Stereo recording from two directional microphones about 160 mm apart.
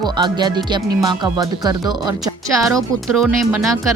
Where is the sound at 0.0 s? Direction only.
25° right (ahead or behind).